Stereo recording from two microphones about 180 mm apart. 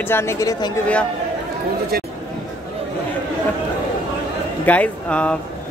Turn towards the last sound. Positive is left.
turn(degrees=5)  # may be behind; listen again after turning